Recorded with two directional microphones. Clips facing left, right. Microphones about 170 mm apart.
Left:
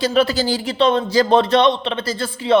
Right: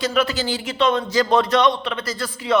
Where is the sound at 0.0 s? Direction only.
30° left (ahead or behind).